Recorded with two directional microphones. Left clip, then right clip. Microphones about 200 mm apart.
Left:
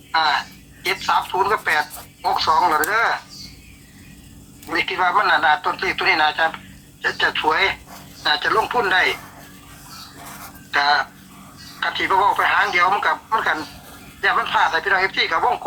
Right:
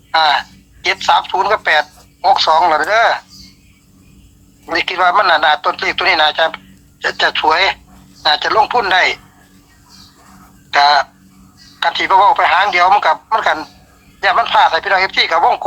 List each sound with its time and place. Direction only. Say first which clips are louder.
0.1 s speech: right 6 dB; 50° right (ahead or behind)
4.7 s speech: right 6 dB; 50° right (ahead or behind)
10.7 s speech: right 7 dB; 50° right (ahead or behind)